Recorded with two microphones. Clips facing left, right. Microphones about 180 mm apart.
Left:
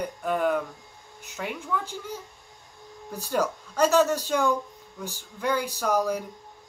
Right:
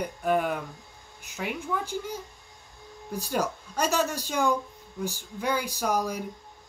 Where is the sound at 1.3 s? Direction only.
10° right (ahead or behind).